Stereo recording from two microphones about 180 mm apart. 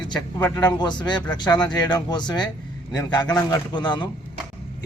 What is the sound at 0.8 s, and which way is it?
A man's voice, 25° left (ahead or behind).